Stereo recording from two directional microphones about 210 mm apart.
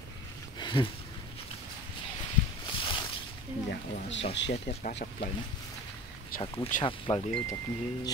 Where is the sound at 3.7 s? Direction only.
55° left (ahead or behind).